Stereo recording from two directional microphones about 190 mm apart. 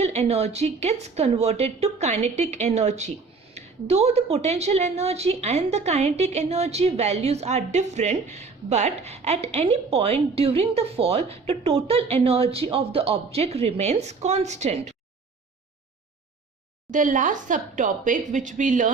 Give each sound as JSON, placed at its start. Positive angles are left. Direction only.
{"t": 0.0, "sound": "a woman's voice", "side_deg": -35}
{"t": 16.9, "sound": "speech", "side_deg": -45}